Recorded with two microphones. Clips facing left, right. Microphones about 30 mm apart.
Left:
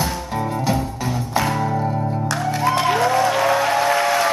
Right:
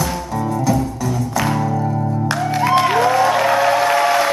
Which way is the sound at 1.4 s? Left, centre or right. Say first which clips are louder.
Right 2 dB; centre.